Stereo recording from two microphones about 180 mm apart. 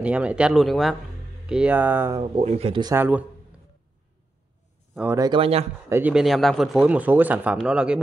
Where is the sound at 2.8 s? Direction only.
15° right (ahead or behind).